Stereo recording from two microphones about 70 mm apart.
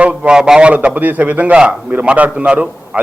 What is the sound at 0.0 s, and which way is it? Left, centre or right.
A man's voice, centre.